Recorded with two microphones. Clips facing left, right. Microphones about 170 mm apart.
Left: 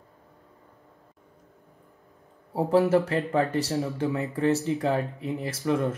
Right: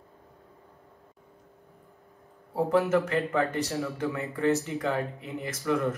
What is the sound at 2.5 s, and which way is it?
Speech, 30° left (ahead or behind).